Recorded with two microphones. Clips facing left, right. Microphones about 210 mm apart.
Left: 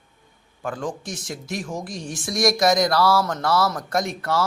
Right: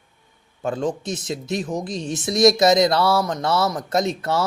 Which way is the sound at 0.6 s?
25° right (ahead or behind).